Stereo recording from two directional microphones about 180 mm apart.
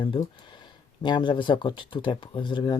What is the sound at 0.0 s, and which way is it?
Speech, 25° left (ahead or behind).